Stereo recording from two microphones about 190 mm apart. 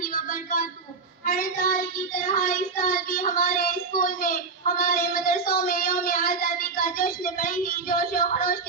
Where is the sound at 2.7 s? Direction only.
50° left (ahead or behind).